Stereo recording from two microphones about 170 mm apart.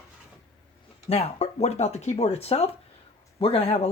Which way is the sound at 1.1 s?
40° left (ahead or behind).